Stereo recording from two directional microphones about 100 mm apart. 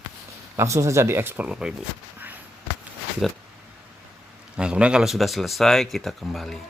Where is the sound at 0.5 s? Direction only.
30° right (ahead or behind).